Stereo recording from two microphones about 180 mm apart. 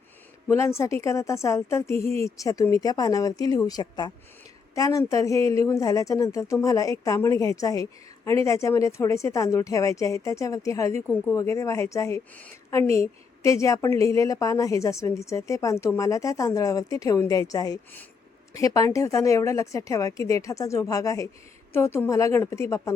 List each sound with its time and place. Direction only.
0.4 s speech: 15° left (ahead or behind)